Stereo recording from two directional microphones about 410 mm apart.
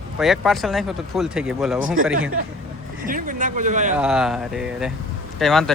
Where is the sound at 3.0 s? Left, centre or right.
Centre.